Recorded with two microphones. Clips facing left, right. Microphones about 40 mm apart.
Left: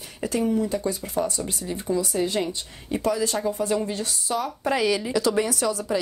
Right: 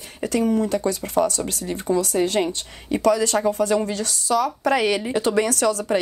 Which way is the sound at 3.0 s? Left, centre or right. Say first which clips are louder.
Right 6 dB; right.